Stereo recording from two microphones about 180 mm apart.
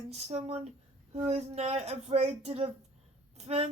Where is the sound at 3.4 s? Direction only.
35° right (ahead or behind).